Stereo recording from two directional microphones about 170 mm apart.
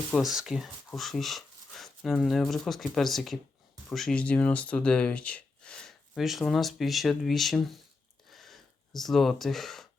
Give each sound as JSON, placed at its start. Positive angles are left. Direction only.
{"t": 0.1, "sound": "speech", "side_deg": 0}
{"t": 8.3, "sound": "gasp", "side_deg": 0}